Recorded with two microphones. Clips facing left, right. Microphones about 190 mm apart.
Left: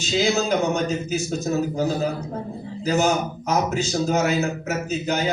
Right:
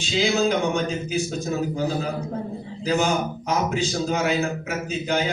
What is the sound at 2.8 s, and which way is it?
A man's voice, 45° left (ahead or behind).